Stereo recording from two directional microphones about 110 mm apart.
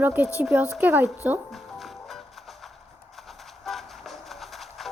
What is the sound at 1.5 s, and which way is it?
Music, centre (ahead or behind).